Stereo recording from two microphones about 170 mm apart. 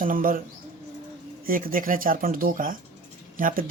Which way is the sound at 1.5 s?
55° right (ahead or behind).